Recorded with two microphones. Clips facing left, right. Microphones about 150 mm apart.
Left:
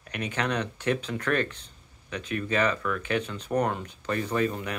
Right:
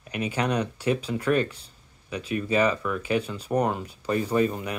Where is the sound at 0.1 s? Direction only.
10° right (ahead or behind).